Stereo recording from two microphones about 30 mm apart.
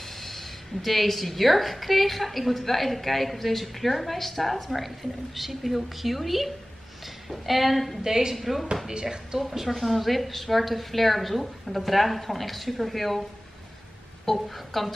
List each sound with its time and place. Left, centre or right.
0.0 s a woman's voice: centre
8.0 s a woman's voice: centre
8.4 s a woman's voice: centre
14.2 s a woman's voice: centre